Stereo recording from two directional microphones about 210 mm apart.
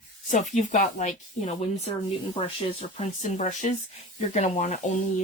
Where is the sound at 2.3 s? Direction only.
25° left (ahead or behind).